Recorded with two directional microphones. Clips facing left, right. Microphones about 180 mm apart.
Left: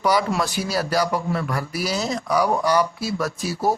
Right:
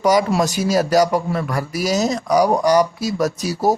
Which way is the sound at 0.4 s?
45° right (ahead or behind).